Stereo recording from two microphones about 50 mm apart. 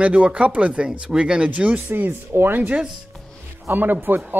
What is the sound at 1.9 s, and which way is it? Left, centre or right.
Speech, right.